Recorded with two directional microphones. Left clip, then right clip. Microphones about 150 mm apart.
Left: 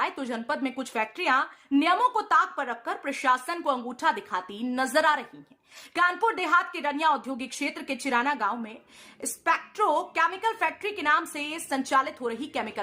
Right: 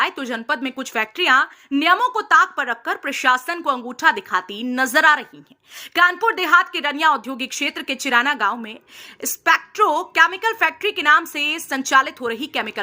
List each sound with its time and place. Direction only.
0.0 s a woman's voice: 15° right (ahead or behind)